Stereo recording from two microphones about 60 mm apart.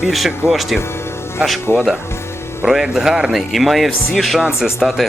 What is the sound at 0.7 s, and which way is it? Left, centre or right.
Music, left.